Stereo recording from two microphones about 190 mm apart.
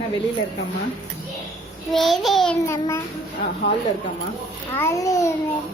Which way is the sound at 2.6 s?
15° left (ahead or behind).